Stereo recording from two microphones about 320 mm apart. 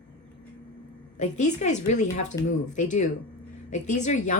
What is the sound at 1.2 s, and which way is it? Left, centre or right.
A woman's voice, left.